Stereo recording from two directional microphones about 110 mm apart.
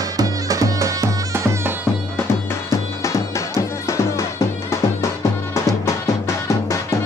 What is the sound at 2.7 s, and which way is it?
Music, 25° left (ahead or behind).